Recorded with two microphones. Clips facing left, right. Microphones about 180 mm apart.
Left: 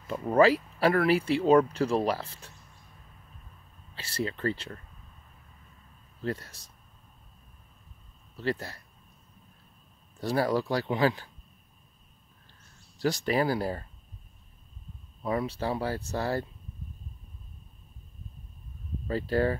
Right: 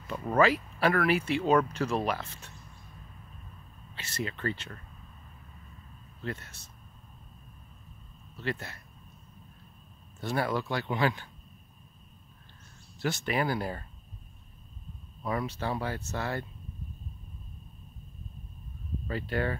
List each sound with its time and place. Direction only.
0.3 s speech: 30° left (ahead or behind)
3.9 s speech: 30° left (ahead or behind)
6.2 s speech: 35° left (ahead or behind)
8.4 s speech: 35° left (ahead or behind)
10.2 s speech: 35° left (ahead or behind)
13.0 s speech: 35° left (ahead or behind)
15.2 s speech: 30° left (ahead or behind)
19.0 s speech: 35° left (ahead or behind)